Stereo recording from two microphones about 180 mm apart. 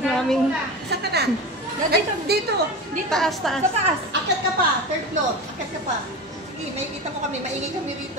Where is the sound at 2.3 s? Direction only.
60° right (ahead or behind).